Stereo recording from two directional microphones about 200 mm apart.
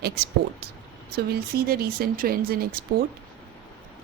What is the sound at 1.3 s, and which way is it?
A woman's voice, 50° right (ahead or behind).